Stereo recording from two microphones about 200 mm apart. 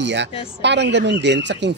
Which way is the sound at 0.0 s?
60° right (ahead or behind).